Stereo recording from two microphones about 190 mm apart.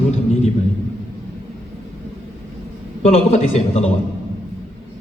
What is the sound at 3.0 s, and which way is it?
Speech, 35° left (ahead or behind).